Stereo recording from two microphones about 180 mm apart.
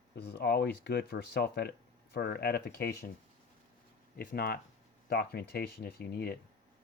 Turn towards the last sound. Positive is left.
turn(degrees=60)  # may be behind; listen again after turning